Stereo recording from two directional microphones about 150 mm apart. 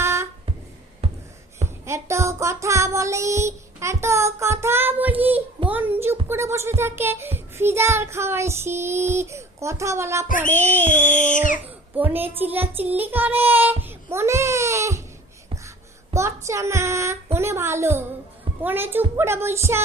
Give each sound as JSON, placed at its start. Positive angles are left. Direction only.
{"t": 0.0, "sound": "music", "side_deg": -15}
{"t": 1.0, "sound": "a sound", "side_deg": -40}
{"t": 1.8, "sound": "music", "side_deg": -20}
{"t": 5.6, "sound": "a child's voice", "side_deg": -15}
{"t": 6.2, "sound": "music", "side_deg": -15}
{"t": 10.9, "sound": "a sound", "side_deg": 55}
{"t": 11.6, "sound": "music", "side_deg": -10}
{"t": 13.8, "sound": "baby cry", "side_deg": -15}
{"t": 16.1, "sound": "a woman's voice", "side_deg": -20}
{"t": 17.3, "sound": "music", "side_deg": -15}